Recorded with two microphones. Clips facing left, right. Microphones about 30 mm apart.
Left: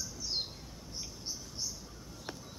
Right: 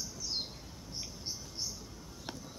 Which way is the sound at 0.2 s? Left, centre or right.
Centre.